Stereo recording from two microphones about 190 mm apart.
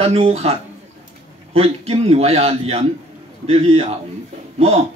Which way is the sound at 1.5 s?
30° right (ahead or behind).